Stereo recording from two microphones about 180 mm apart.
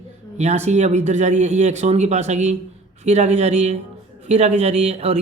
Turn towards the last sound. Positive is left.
turn(degrees=-35)  # may be behind; listen again after turning